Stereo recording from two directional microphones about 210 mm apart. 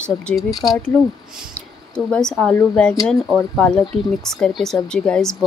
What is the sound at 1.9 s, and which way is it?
Speech, 5° left (ahead or behind).